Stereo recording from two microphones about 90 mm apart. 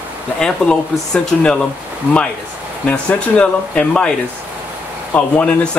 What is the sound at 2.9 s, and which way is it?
Speech, 15° left (ahead or behind).